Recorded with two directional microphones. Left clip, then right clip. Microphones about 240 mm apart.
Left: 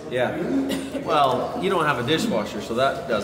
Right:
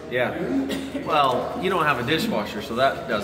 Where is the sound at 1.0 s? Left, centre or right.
Left.